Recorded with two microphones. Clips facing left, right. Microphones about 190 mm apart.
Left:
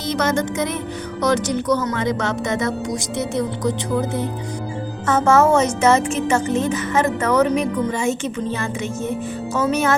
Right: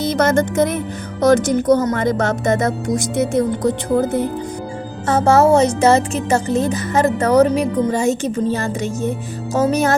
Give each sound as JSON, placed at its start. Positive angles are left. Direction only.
{"t": 0.0, "sound": "speech", "side_deg": -50}
{"t": 5.0, "sound": "speech", "side_deg": -35}